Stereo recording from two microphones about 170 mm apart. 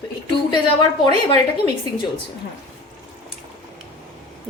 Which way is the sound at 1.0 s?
25° left (ahead or behind).